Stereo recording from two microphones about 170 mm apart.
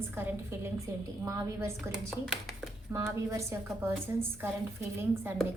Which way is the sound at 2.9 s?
15° right (ahead or behind).